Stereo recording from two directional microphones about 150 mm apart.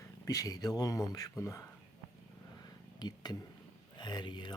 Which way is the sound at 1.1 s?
20° left (ahead or behind).